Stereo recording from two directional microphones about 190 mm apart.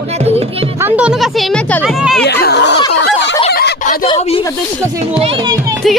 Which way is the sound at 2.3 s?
60° left (ahead or behind).